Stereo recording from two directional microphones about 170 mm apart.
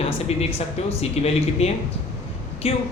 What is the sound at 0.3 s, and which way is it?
A man's voice, 40° left (ahead or behind).